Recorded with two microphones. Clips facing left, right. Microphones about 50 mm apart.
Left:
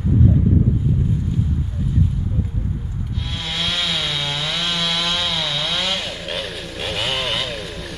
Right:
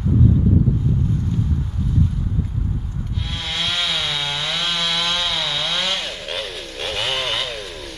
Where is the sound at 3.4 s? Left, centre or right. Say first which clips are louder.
Even; centre.